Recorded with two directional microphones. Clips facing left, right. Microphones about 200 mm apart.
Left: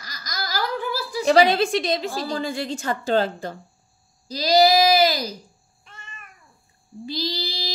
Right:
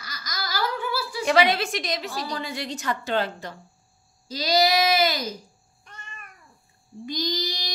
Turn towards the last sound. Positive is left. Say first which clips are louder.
# left 1 dB
turn(degrees=30)  # may be behind; listen again after turning